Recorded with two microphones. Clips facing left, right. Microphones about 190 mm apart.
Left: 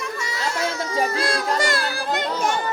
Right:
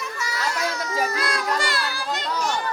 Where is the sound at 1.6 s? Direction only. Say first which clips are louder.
Left 4 dB; 50° left (ahead or behind).